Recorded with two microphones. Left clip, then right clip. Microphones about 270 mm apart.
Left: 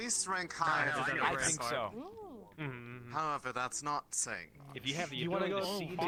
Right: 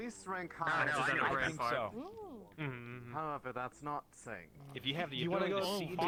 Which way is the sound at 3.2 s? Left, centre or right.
Left.